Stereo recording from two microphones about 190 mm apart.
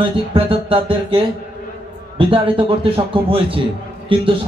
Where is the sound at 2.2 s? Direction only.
25° right (ahead or behind).